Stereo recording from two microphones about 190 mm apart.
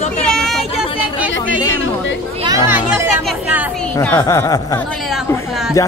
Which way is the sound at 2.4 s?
15° right (ahead or behind).